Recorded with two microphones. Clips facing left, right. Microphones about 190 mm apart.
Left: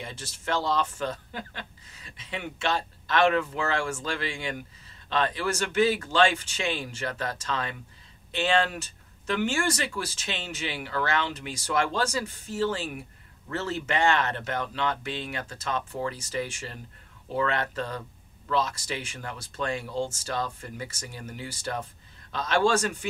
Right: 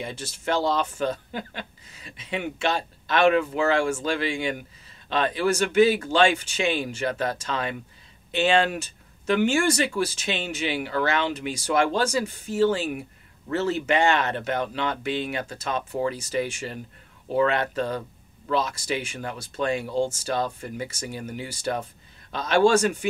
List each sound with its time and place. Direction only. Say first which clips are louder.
0.0 s speech: right 6 dB; 10° right (ahead or behind)